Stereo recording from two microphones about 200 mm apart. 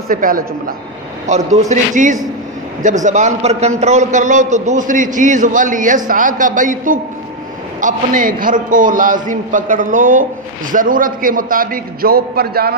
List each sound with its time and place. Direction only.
0.1 s a man's voice: 45° right (ahead or behind)
1.2 s a man's voice: 35° right (ahead or behind)